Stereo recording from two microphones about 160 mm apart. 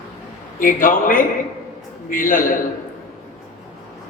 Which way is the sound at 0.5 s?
60° left (ahead or behind).